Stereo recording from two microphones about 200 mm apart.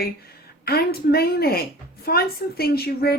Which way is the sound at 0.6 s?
50° left (ahead or behind).